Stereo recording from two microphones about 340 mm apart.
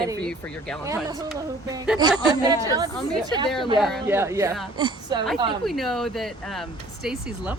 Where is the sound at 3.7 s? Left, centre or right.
Centre.